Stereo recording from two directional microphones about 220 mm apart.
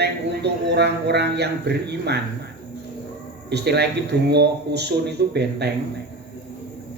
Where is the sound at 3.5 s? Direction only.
50° right (ahead or behind).